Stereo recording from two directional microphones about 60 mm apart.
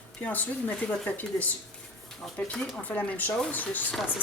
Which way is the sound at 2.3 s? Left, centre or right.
Centre.